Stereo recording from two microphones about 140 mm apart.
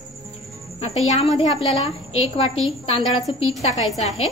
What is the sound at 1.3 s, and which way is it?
Speech, 45° left (ahead or behind).